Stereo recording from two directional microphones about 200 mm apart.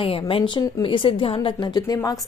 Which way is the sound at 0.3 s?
25° left (ahead or behind).